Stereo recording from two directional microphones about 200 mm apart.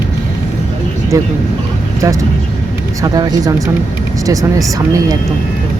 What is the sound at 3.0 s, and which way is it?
Speech, 20° right (ahead or behind).